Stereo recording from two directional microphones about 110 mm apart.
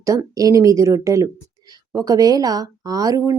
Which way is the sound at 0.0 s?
30° right (ahead or behind).